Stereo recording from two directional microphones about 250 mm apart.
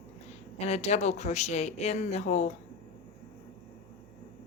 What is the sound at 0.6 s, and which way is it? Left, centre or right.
Speech, left.